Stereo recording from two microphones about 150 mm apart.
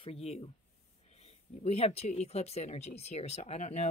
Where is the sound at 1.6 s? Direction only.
45° left (ahead or behind).